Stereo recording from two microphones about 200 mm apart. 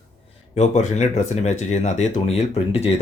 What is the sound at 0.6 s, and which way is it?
Speech, 35° left (ahead or behind).